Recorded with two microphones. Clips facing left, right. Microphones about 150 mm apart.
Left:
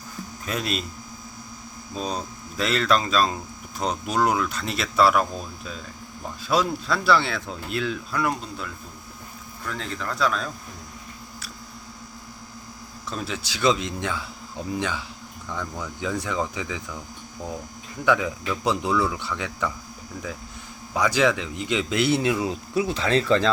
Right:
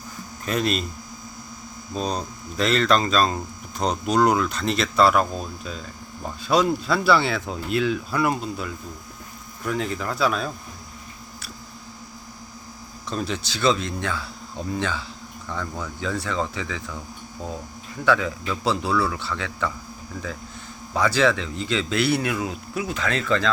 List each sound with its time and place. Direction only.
0.4 s speech: 5° left (ahead or behind)
2.0 s speech: 5° left (ahead or behind)
6.5 s speech: centre (ahead or behind)
13.1 s a man's voice: 5° left (ahead or behind)
18.0 s a man's voice: 15° left (ahead or behind)
20.9 s speech: 15° left (ahead or behind); by 23.5 s 30° left (ahead or behind)